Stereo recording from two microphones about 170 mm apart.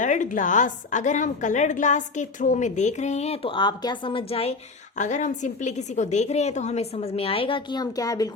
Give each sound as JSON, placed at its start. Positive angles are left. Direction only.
{"t": 0.0, "sound": "a woman's voice", "side_deg": 50}